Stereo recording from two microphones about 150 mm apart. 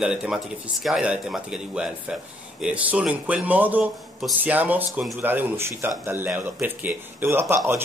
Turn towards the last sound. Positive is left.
turn(degrees=-15)  # may be behind; listen again after turning